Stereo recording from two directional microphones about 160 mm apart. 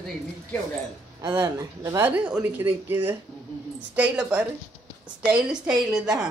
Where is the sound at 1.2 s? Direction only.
20° right (ahead or behind).